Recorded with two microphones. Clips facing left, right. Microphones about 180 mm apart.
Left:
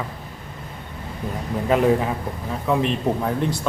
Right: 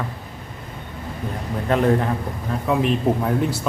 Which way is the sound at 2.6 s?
5° right (ahead or behind).